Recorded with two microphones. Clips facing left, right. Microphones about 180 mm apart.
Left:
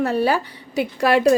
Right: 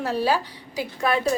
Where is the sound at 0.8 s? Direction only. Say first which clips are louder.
Left 6 dB; 80° left.